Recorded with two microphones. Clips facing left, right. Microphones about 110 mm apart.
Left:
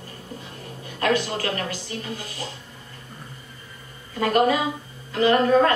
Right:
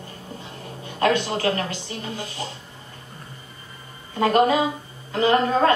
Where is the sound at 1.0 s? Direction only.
25° right (ahead or behind).